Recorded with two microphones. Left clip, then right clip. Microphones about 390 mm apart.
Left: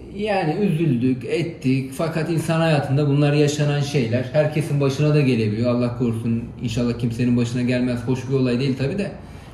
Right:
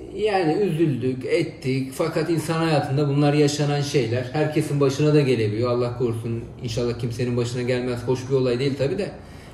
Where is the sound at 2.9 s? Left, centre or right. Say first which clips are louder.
Left 1 dB; right.